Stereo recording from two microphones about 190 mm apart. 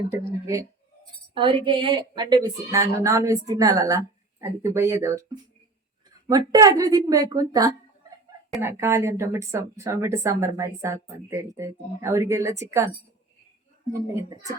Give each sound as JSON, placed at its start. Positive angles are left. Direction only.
{"t": 0.4, "sound": "a woman's voice", "side_deg": -15}
{"t": 1.3, "sound": "a woman's voice", "side_deg": -25}
{"t": 13.9, "sound": "a woman's voice", "side_deg": -15}